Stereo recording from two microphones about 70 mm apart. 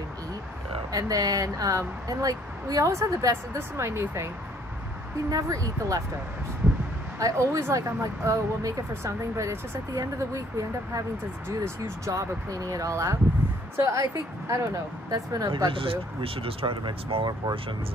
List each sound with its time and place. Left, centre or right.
0.9 s speech: right
3.5 s speech: right
5.3 s speech: right
7.2 s speech: right
11.4 s speech: right
12.1 s speech: right
15.0 s speech: right
16.6 s speech: right